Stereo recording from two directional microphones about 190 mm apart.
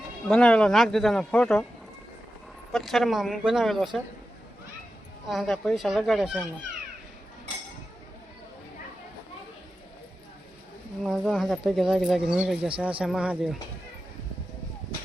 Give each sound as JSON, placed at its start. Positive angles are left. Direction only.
{"t": 0.3, "sound": "speech", "side_deg": 5}
{"t": 2.7, "sound": "speech", "side_deg": 0}
{"t": 5.3, "sound": "speech", "side_deg": 0}
{"t": 11.0, "sound": "speech", "side_deg": 0}